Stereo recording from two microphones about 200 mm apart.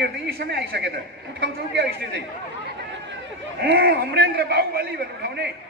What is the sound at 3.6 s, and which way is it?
A man's voice, 50° right (ahead or behind).